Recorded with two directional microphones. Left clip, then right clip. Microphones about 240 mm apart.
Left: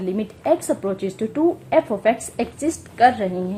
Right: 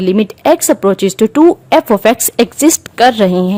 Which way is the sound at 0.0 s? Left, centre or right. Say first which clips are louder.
Right 13 dB; right.